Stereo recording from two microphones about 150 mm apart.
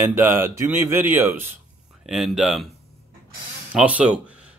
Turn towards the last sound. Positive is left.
turn(degrees=-10)  # may be behind; listen again after turning